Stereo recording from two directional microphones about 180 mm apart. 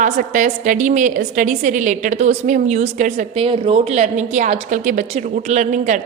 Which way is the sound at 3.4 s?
30° right (ahead or behind).